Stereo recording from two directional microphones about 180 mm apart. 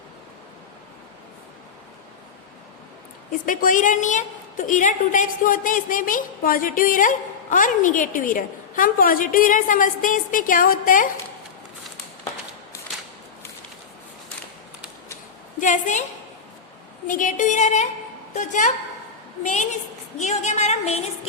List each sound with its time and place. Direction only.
3.4 s a woman's voice: 50° left (ahead or behind)
15.6 s a woman's voice: 45° left (ahead or behind)
17.1 s a woman's voice: 45° left (ahead or behind)
20.2 s a woman's voice: 40° left (ahead or behind)